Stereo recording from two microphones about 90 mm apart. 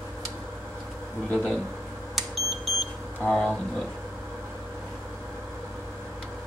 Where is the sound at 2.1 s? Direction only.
Centre (ahead or behind).